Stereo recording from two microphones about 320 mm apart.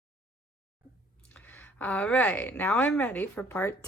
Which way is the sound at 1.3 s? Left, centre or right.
Centre.